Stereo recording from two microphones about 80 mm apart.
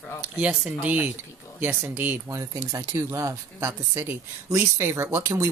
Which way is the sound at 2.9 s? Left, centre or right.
Right.